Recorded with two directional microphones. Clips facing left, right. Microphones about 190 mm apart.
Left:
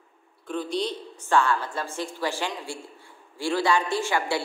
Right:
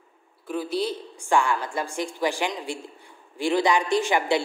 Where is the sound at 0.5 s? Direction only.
5° right (ahead or behind).